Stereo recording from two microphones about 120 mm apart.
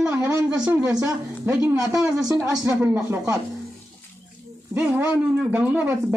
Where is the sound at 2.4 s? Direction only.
20° right (ahead or behind).